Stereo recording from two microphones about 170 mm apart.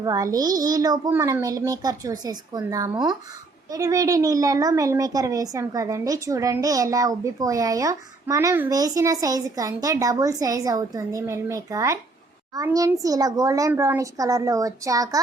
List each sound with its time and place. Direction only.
0.0 s a woman's voice: 20° right (ahead or behind)